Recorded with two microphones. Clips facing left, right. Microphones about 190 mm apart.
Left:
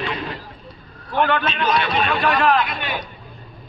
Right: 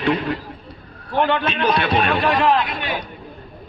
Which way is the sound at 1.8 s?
60° right (ahead or behind).